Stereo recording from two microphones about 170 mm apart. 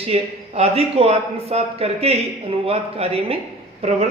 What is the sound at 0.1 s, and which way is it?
A man's voice, 35° right (ahead or behind).